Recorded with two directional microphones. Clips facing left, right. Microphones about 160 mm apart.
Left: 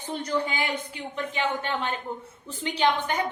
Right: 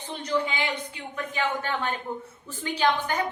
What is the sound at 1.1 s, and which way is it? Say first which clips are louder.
A woman's voice: even; 20° left (ahead or behind).